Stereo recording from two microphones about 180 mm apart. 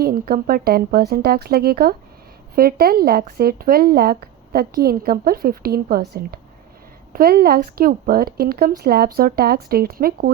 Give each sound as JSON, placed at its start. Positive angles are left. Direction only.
{"t": 0.0, "sound": "speech", "side_deg": -60}
{"t": 7.1, "sound": "speech", "side_deg": -55}